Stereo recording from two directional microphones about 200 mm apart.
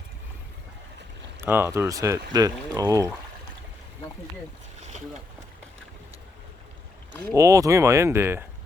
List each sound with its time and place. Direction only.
1.4 s speech: 10° right (ahead or behind)
7.3 s speech: 15° right (ahead or behind)